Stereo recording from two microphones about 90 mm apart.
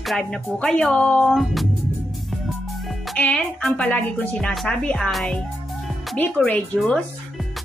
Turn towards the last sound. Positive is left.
turn(degrees=10)  # may be behind; listen again after turning